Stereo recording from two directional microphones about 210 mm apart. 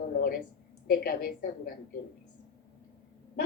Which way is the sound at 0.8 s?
45° left (ahead or behind).